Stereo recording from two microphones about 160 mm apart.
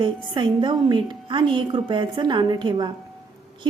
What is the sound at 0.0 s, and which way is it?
A woman's voice, 30° right (ahead or behind).